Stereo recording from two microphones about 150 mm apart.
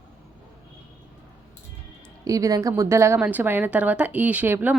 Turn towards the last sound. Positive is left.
turn(degrees=-15)  # may be behind; listen again after turning